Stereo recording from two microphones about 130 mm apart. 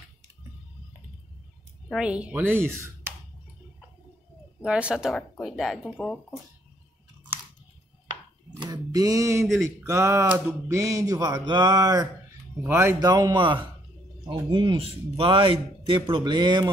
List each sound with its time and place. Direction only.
1.9 s a woman's voice: 5° right (ahead or behind)
4.6 s speech: 10° right (ahead or behind)
8.5 s a sound: 30° right (ahead or behind)
9.8 s speech: 20° right (ahead or behind)
12.6 s a woman's voice: 20° right (ahead or behind)
13.0 s a man's voice: 30° right (ahead or behind)